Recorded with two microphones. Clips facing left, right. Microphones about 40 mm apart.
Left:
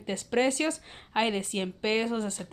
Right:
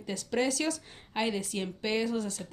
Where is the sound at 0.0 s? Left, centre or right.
Left.